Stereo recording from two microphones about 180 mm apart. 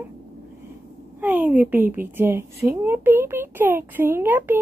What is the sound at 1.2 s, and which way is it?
Speech, 10° right (ahead or behind).